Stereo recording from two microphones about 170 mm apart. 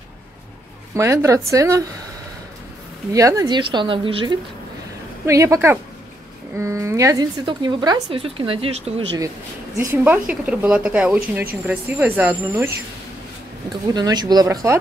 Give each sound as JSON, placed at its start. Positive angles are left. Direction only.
{"t": 0.9, "sound": "speech", "side_deg": -15}
{"t": 3.1, "sound": "speech", "side_deg": -20}
{"t": 5.2, "sound": "speech", "side_deg": -20}
{"t": 9.8, "sound": "speech", "side_deg": -15}
{"t": 13.9, "sound": "speech", "side_deg": -25}